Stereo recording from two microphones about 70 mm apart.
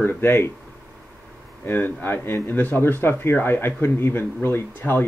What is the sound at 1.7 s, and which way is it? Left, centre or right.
Speech, left.